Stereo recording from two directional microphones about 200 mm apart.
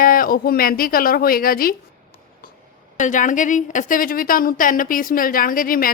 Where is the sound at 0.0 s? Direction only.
45° left (ahead or behind).